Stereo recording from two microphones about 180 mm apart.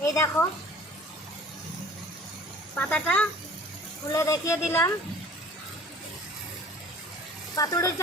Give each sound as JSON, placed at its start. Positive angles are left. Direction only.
{"t": 0.0, "sound": "speech", "side_deg": 15}
{"t": 2.7, "sound": "speech", "side_deg": 5}
{"t": 7.5, "sound": "speech", "side_deg": 20}